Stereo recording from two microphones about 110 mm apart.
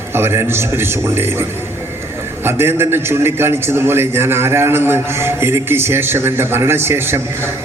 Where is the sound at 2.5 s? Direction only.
20° right (ahead or behind).